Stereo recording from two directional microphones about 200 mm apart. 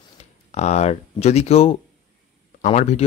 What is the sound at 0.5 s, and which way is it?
Speech, 35° left (ahead or behind).